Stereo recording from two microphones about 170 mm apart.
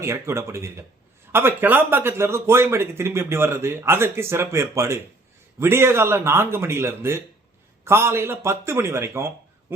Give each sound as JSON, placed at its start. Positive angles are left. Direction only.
{"t": 0.0, "sound": "speech", "side_deg": -15}